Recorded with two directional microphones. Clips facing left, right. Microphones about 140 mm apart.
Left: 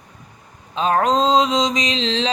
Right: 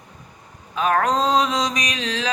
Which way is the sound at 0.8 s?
25° left (ahead or behind).